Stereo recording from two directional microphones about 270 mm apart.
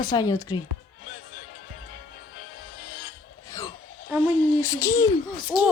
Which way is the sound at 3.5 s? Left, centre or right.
Centre.